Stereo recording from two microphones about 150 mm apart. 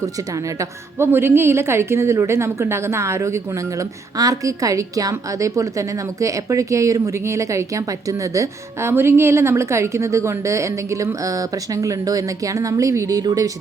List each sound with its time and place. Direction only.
0.6 s a woman's voice: 15° right (ahead or behind)